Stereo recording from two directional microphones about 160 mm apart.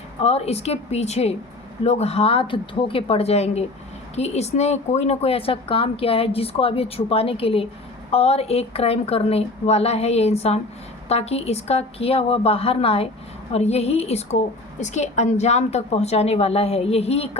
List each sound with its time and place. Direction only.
0.2 s speech: 40° left (ahead or behind)